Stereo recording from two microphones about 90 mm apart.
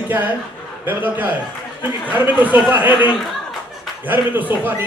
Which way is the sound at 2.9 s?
55° left (ahead or behind).